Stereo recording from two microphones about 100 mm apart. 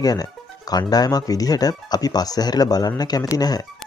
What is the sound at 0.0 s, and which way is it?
Speech, 40° left (ahead or behind).